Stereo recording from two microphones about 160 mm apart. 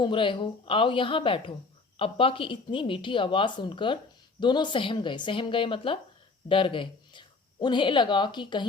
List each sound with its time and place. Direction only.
0.0 s speech: 30° left (ahead or behind)